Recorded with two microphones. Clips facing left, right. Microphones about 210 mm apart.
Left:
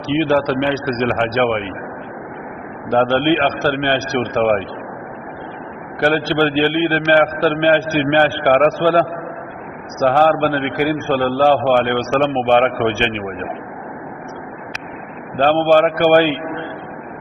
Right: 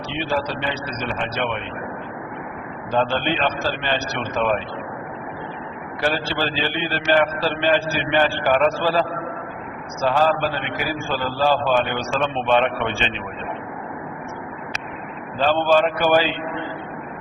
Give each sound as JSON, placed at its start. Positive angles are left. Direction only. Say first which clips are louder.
{"t": 0.2, "sound": "a man's voice", "louder": "left 8 dB", "side_deg": 65}
{"t": 2.9, "sound": "a man's voice", "louder": "left 7 dB", "side_deg": 60}
{"t": 6.0, "sound": "a man's voice", "louder": "left 8 dB", "side_deg": 55}
{"t": 15.4, "sound": "a man's voice", "louder": "left 5 dB", "side_deg": 55}